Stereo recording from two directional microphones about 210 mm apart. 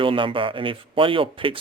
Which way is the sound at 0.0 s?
25° right (ahead or behind).